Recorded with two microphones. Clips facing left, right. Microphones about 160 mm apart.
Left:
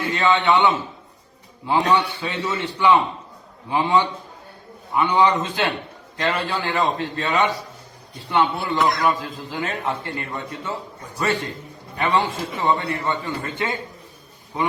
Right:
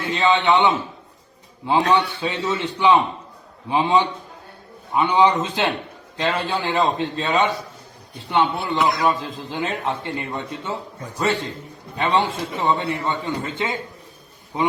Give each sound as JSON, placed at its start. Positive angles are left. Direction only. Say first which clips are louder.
{"t": 0.1, "sound": "a man's voice", "louder": "right 1 dB", "side_deg": -20}
{"t": 1.9, "sound": "a man's voice", "louder": "right 1 dB", "side_deg": -20}
{"t": 8.8, "sound": "a man's voice", "louder": "even", "side_deg": 0}
{"t": 9.0, "sound": "a man's voice", "louder": "right 1 dB", "side_deg": -25}
{"t": 11.9, "sound": "a man's voice", "louder": "right 1 dB", "side_deg": -20}